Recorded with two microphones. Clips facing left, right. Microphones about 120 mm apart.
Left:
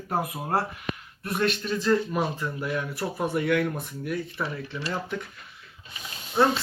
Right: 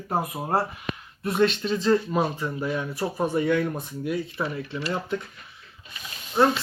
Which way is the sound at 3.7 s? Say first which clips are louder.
Right 2 dB; 20° right (ahead or behind).